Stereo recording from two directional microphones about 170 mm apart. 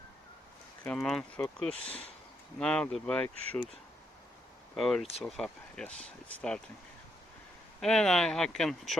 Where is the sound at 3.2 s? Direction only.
35° right (ahead or behind).